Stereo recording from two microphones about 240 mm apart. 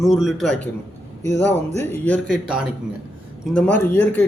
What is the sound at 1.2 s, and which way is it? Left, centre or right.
Speech, centre.